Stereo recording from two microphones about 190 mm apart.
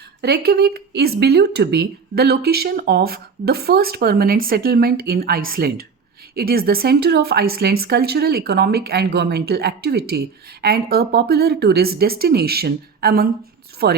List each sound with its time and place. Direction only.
0.2 s a woman's voice: 55° right (ahead or behind)